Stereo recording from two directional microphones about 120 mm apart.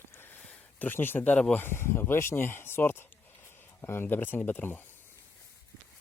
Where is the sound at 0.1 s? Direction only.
15° left (ahead or behind).